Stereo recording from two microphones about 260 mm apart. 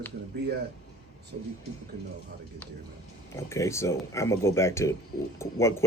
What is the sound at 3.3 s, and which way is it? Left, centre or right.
Speech, centre.